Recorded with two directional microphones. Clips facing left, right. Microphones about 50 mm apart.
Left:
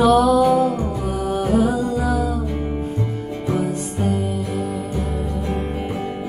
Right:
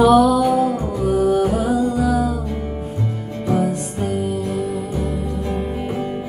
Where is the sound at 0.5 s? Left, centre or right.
Centre.